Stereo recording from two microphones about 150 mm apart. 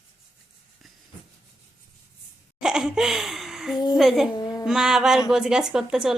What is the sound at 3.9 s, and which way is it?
Speech, centre (ahead or behind).